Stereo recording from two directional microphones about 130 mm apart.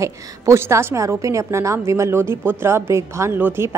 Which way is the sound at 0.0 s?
20° right (ahead or behind).